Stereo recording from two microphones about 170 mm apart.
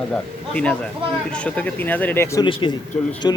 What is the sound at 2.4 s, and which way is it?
Mantra, 30° left (ahead or behind).